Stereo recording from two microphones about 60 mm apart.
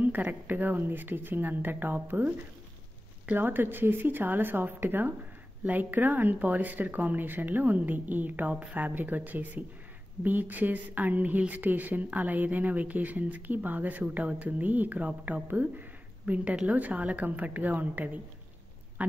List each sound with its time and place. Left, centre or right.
0.0 s speech: right
3.3 s speech: right